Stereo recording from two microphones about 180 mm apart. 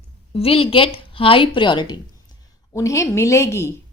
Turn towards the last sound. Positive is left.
turn(degrees=15)  # may be behind; listen again after turning